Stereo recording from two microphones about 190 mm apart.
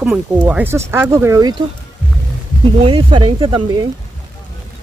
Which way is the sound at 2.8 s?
25° right (ahead or behind).